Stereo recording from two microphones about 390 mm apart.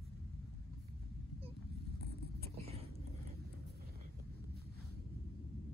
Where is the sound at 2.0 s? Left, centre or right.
Right.